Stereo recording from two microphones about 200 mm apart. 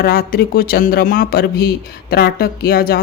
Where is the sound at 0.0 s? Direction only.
45° left (ahead or behind).